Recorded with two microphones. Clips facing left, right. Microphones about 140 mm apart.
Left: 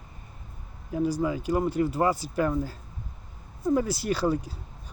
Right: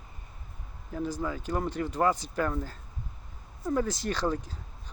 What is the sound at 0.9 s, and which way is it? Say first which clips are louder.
Speech: left 6 dB; 15° left (ahead or behind).